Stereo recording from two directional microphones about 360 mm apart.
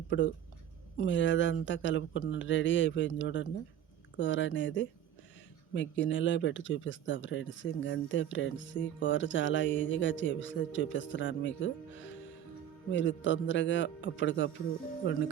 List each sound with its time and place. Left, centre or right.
0.1 s speech: left